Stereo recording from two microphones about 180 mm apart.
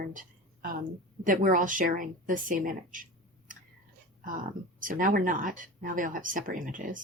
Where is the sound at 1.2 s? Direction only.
50° right (ahead or behind).